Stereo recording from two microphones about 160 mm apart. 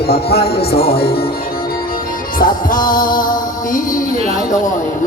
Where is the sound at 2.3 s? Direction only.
60° left (ahead or behind).